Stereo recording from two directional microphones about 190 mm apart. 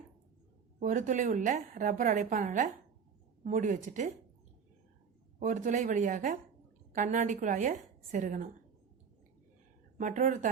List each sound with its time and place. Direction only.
0.8 s a woman's voice: 40° right (ahead or behind)
5.4 s a woman's voice: 40° right (ahead or behind)
10.0 s a woman's voice: 45° right (ahead or behind)